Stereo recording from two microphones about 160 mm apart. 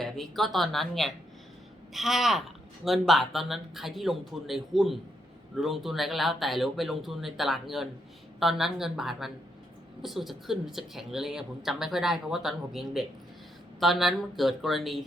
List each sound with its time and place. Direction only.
0.0 s speech: centre (ahead or behind)